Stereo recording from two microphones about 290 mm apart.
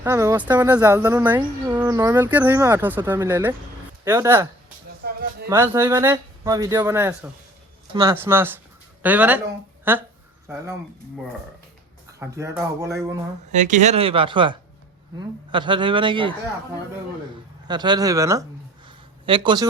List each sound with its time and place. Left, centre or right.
0.0 s speech: centre
5.0 s a sound: right
5.5 s speech: centre
12.2 s speech: centre
13.5 s speech: right
17.7 s speech: centre
18.9 s a sound: centre